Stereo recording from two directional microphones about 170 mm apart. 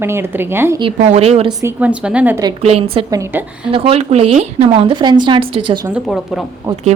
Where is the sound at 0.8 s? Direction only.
35° right (ahead or behind).